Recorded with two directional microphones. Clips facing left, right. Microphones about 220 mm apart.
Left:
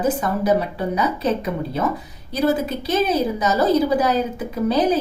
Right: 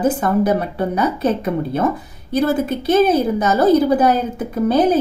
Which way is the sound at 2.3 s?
55° right (ahead or behind).